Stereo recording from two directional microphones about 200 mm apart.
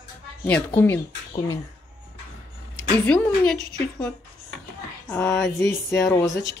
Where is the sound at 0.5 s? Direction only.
10° left (ahead or behind).